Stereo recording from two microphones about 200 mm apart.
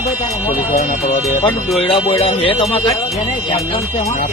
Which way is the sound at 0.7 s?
40° left (ahead or behind).